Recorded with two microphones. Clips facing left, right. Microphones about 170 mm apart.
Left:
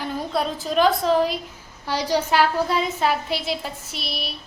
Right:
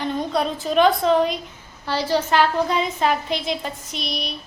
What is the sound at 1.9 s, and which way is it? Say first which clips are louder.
A woman's voice: right 1 dB; 15° left (ahead or behind).